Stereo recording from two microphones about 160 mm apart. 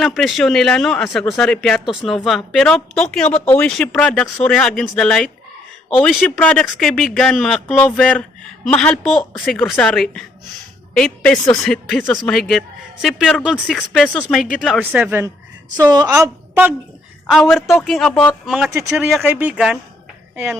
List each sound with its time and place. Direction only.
0.0 s a man's voice: centre (ahead or behind)
14.6 s speech: 5° right (ahead or behind)
15.7 s a woman's voice: 25° right (ahead or behind)
17.3 s a man's voice: centre (ahead or behind)
18.4 s a man's voice: 5° right (ahead or behind)